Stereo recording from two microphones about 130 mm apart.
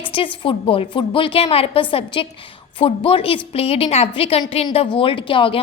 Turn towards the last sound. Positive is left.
turn(degrees=40)  # may be behind; listen again after turning